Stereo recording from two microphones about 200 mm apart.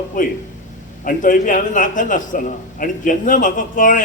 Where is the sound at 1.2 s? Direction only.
40° left (ahead or behind).